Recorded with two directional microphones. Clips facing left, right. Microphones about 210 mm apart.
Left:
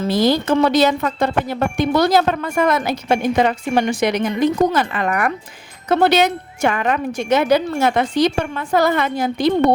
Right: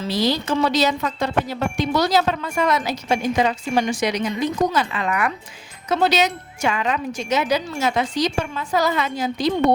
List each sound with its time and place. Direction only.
0.0 s speech: 50° left (ahead or behind)